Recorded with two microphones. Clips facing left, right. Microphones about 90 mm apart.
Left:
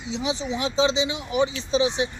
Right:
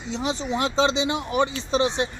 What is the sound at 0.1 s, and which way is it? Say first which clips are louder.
Speech: right 1 dB; 50° right (ahead or behind).